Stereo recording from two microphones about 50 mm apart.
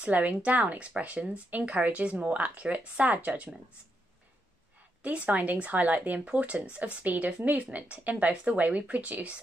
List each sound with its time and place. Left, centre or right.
0.0 s speech: right
5.0 s speech: right